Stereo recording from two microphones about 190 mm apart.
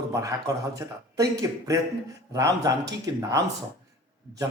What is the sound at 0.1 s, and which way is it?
Speech, 15° right (ahead or behind).